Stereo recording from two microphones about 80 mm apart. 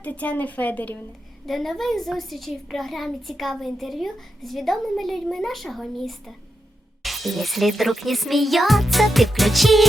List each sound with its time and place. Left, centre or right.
0.0 s a woman's voice: centre
1.5 s a child's voice: centre